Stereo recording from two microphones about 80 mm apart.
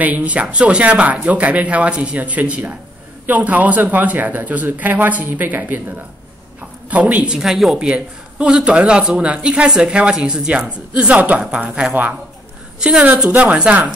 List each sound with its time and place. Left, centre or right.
0.0 s speech: centre